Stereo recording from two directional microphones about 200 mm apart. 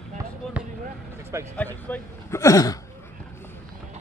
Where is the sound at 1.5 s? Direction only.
10° left (ahead or behind).